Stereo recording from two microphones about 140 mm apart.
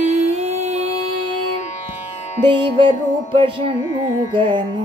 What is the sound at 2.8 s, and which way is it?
Carnatic music, 40° right (ahead or behind).